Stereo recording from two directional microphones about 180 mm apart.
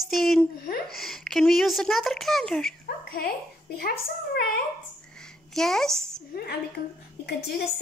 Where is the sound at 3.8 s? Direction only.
60° left (ahead or behind).